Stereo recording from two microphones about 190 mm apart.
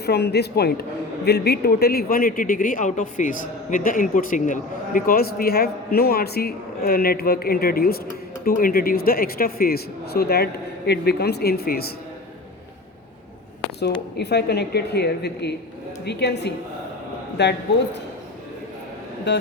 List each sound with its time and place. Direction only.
0.0 s a man's voice: 60° left (ahead or behind)
14.2 s a woman's voice: 60° left (ahead or behind)
19.3 s a woman's voice: 65° left (ahead or behind)